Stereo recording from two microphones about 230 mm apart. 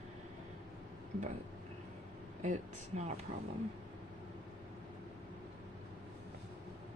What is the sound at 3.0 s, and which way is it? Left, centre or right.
Speech, right.